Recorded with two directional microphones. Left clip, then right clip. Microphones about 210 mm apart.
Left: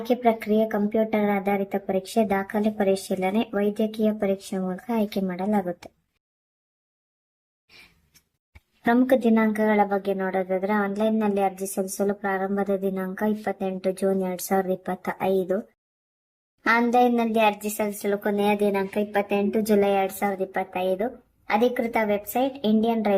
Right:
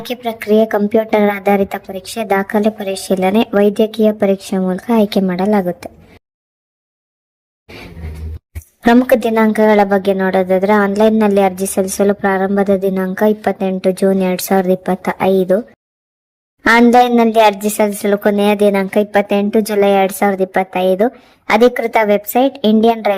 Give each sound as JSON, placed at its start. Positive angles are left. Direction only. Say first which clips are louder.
{"t": 0.3, "sound": "speech", "louder": "right 11 dB", "side_deg": -40}
{"t": 8.9, "sound": "speech", "louder": "right 9 dB", "side_deg": -40}
{"t": 16.6, "sound": "speech", "louder": "right 11 dB", "side_deg": -40}